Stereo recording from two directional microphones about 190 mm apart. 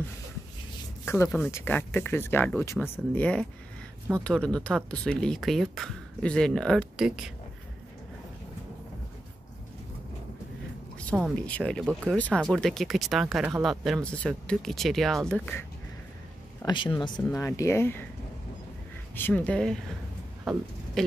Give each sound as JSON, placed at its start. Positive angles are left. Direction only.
{"t": 1.0, "sound": "speech", "side_deg": 10}
{"t": 11.1, "sound": "speech", "side_deg": -5}
{"t": 16.6, "sound": "speech", "side_deg": 25}
{"t": 19.1, "sound": "speech", "side_deg": 10}